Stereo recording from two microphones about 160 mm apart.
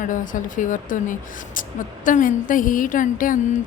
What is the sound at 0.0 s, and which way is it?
A woman's voice, 55° left (ahead or behind).